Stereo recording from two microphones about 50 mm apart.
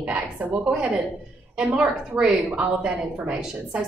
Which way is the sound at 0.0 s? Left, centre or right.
Right.